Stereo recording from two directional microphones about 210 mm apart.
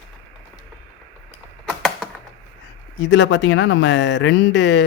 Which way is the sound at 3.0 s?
55° left (ahead or behind).